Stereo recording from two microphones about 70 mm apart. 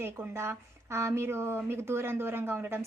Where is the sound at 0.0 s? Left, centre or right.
Right.